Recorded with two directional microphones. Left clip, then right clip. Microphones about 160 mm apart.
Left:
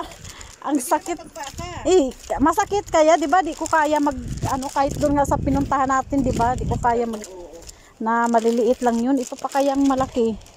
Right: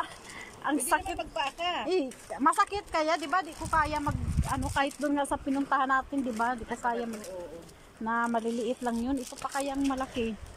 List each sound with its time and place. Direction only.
0.7 s speech: 30° left (ahead or behind)
1.9 s speech: 40° left (ahead or behind)
4.7 s speech: 30° left (ahead or behind)